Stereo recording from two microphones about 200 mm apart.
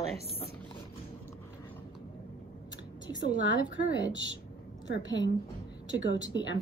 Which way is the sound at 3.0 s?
20° left (ahead or behind).